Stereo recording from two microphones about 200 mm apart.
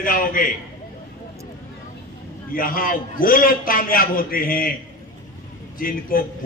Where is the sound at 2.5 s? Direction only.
45° left (ahead or behind).